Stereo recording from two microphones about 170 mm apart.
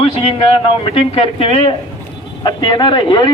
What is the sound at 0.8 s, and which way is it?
A man's voice, 35° left (ahead or behind).